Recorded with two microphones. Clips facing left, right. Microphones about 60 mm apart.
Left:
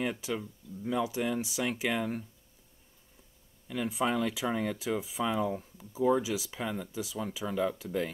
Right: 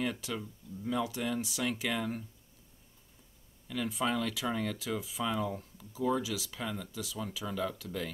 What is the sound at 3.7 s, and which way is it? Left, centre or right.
Speech, centre.